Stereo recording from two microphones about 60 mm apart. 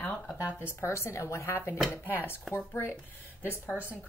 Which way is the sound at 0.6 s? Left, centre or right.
Left.